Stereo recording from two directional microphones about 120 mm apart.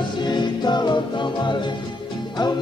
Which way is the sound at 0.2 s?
40° left (ahead or behind).